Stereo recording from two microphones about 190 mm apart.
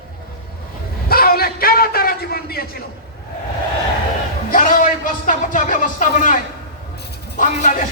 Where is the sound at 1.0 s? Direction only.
50° left (ahead or behind).